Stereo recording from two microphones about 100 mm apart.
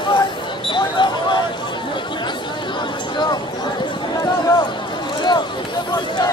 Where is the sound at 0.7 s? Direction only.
50° left (ahead or behind).